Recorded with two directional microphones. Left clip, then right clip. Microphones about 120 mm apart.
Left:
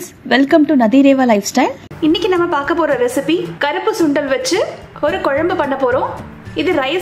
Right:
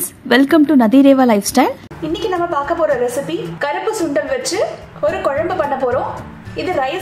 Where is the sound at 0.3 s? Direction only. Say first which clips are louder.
Even; 30° right (ahead or behind).